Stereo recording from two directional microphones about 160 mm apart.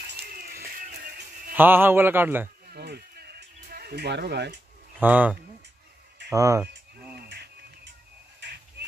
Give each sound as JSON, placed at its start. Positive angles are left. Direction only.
{"t": 0.2, "sound": "music", "side_deg": -70}
{"t": 1.5, "sound": "a man's voice", "side_deg": -10}
{"t": 2.6, "sound": "a sound", "side_deg": -80}
{"t": 5.0, "sound": "a man's voice", "side_deg": -10}
{"t": 7.2, "sound": "insect", "side_deg": -90}
{"t": 8.4, "sound": "a sound", "side_deg": -90}